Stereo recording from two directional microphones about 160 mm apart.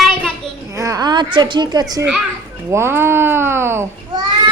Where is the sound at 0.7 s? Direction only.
20° right (ahead or behind).